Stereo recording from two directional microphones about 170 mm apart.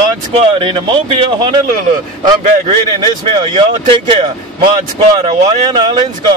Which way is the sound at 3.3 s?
30° right (ahead or behind).